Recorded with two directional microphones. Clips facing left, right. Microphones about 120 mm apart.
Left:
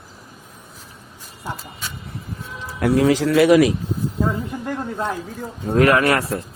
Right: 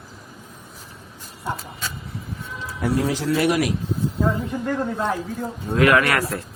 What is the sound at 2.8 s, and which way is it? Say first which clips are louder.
Speech: left 6 dB; 85° left.